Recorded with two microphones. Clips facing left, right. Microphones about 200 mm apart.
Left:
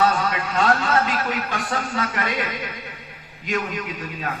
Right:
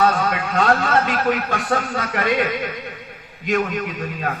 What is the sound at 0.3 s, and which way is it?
A man's voice, 55° right (ahead or behind).